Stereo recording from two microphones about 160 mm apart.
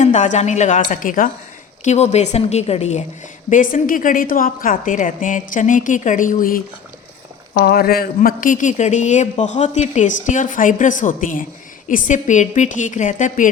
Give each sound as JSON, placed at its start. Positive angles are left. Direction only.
{"t": 0.0, "sound": "speech", "side_deg": 50}
{"t": 1.8, "sound": "speech", "side_deg": 45}
{"t": 3.5, "sound": "a woman's voice", "side_deg": 60}
{"t": 7.5, "sound": "speech", "side_deg": 75}